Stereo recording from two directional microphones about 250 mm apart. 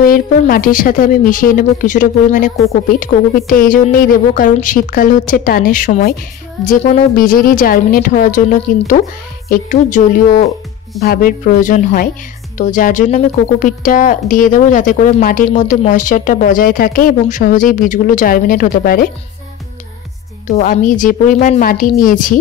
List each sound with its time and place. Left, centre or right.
0.0 s speech: left
20.5 s speech: left